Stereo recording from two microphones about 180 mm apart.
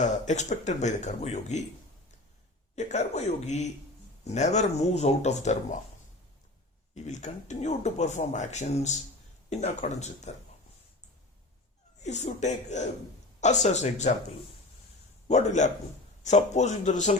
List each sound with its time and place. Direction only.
0.0 s speech: 40° left (ahead or behind)
2.7 s speech: 40° left (ahead or behind)
6.9 s speech: 40° left (ahead or behind)
12.0 s speech: 40° left (ahead or behind)
15.3 s speech: 40° left (ahead or behind)